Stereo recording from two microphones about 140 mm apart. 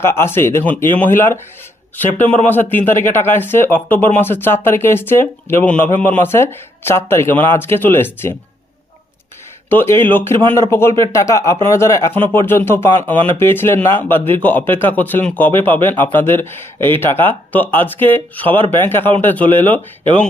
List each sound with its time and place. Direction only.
0.0 s speech: 15° left (ahead or behind)
2.5 s speech: 15° left (ahead or behind)
9.6 s speech: 15° left (ahead or behind)